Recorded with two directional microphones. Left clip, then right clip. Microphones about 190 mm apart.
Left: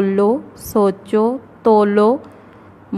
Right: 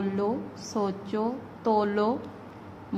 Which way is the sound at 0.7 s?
35° left (ahead or behind).